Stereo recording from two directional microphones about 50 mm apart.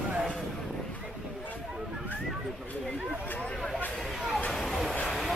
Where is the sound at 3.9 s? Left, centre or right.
Centre.